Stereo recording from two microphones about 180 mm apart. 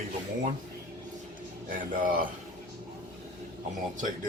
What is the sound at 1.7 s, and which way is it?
Speech, 50° right (ahead or behind).